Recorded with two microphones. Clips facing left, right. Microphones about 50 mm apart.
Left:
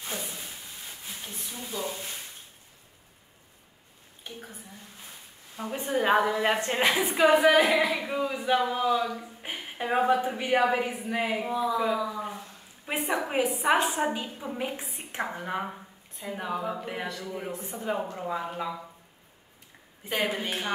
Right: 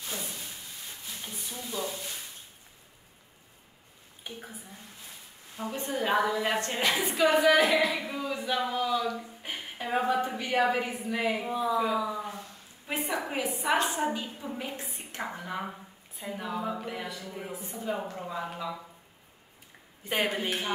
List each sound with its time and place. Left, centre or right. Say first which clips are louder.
0.1 s a sound: left 2 dB; left
1.2 s a sound: right 1 dB; centre
4.2 s a woman's voice: even; centre
5.9 s speech: left 4 dB; left
11.4 s a woman's voice: left 1 dB; centre
12.2 s a sound: left 2 dB; centre
13.1 s speech: left 6 dB; left
17.6 s speech: left 2 dB; left
18.1 s speech: left 3 dB; centre
20.1 s a woman's voice: even; centre